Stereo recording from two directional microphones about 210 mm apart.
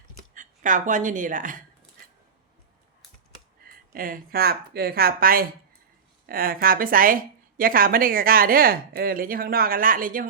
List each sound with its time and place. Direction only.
0.3 s a woman's voice: 40° right (ahead or behind)
3.9 s a woman's voice: 45° right (ahead or behind)